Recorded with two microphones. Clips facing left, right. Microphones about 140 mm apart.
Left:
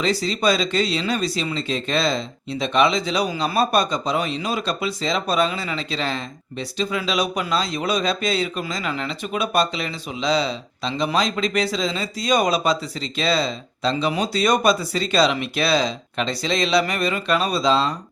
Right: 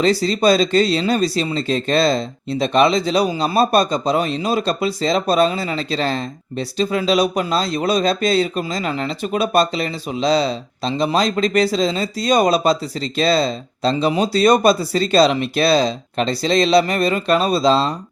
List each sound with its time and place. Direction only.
0.0 s speech: 35° right (ahead or behind)